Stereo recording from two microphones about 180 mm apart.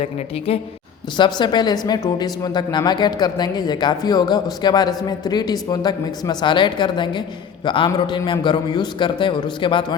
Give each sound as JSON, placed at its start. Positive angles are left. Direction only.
{"t": 0.0, "sound": "a woman's voice", "side_deg": 35}